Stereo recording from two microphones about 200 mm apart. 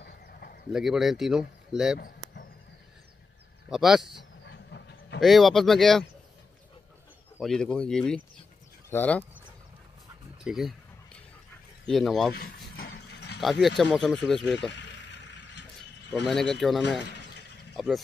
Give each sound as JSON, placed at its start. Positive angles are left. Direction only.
{"t": 0.0, "sound": "a sound", "side_deg": 50}
{"t": 0.7, "sound": "speech", "side_deg": 0}
{"t": 3.6, "sound": "speech", "side_deg": -5}
{"t": 4.5, "sound": "train", "side_deg": 60}
{"t": 5.2, "sound": "speech", "side_deg": 0}
{"t": 7.3, "sound": "speech", "side_deg": 0}
{"t": 10.4, "sound": "speech", "side_deg": 0}
{"t": 11.8, "sound": "speech", "side_deg": 0}
{"t": 12.4, "sound": "a sound", "side_deg": 50}
{"t": 13.4, "sound": "speech", "side_deg": 0}
{"t": 14.7, "sound": "a sound", "side_deg": 60}
{"t": 16.3, "sound": "speech", "side_deg": 0}